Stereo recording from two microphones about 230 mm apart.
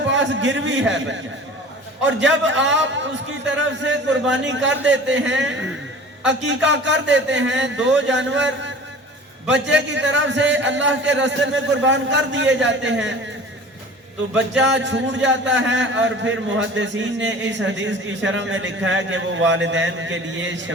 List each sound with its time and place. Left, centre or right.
0.1 s a man's voice: right
14.3 s a man's voice: right